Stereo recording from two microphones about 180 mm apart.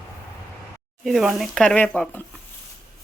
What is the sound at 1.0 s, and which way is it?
Speech, centre (ahead or behind).